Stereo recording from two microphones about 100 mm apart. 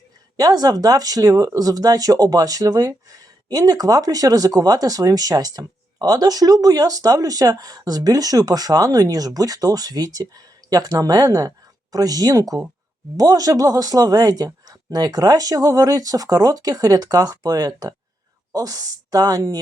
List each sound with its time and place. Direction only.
0.3 s speech: 40° right (ahead or behind)